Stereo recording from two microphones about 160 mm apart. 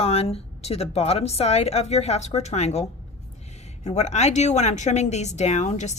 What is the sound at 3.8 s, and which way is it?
Speech, 45° left (ahead or behind).